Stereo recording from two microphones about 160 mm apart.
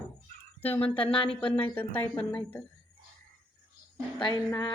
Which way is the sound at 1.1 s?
35° left (ahead or behind).